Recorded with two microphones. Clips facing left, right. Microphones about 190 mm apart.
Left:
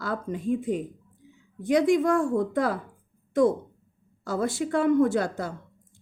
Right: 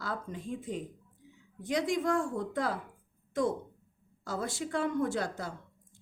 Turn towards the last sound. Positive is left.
turn(degrees=70)  # may be behind; listen again after turning